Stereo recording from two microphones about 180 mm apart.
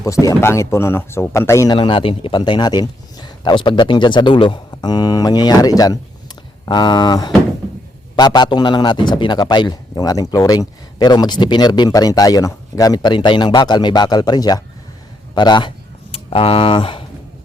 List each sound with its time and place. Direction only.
0.0 s speech: 20° left (ahead or behind)
1.7 s a man's voice: 30° left (ahead or behind)